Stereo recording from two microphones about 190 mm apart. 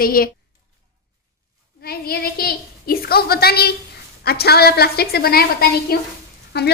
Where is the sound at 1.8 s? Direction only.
55° left (ahead or behind).